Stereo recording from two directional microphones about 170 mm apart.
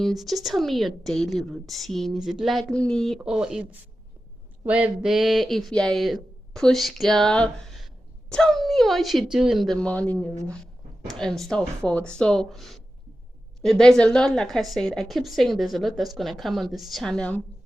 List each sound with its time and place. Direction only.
0.0 s a woman's voice: centre (ahead or behind)